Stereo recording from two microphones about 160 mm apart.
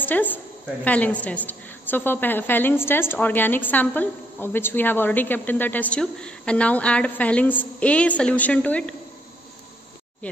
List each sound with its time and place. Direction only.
0.0 s a woman's voice: 10° left (ahead or behind)